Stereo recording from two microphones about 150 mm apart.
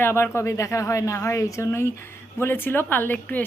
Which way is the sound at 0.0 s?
15° left (ahead or behind).